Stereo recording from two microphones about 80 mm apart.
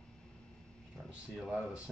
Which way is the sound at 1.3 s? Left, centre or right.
Centre.